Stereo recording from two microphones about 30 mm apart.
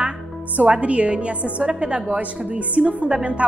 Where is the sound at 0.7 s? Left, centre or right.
Right.